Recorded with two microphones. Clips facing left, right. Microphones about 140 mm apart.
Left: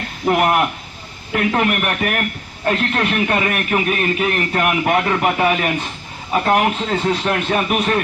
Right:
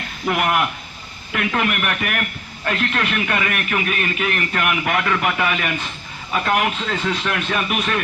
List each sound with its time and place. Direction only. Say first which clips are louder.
0.3 s a man's voice: left 4 dB; 35° left (ahead or behind)